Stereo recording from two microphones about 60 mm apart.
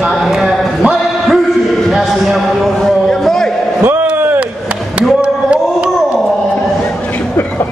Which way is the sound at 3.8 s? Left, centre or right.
Right.